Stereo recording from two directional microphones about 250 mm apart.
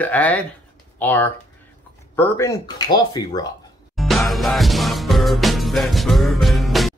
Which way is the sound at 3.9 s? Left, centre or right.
Centre.